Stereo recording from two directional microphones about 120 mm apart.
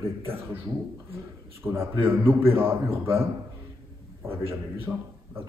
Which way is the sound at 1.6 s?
20° right (ahead or behind).